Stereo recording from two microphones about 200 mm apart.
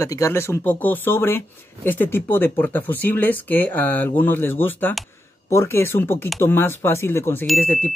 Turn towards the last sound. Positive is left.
turn(degrees=5)  # may be behind; listen again after turning